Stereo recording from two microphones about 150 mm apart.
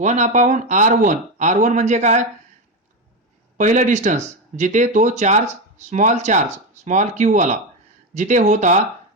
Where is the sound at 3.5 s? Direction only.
55° right (ahead or behind).